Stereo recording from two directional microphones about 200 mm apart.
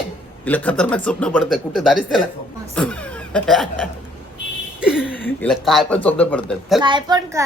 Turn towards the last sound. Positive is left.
turn(degrees=-20)  # may be behind; listen again after turning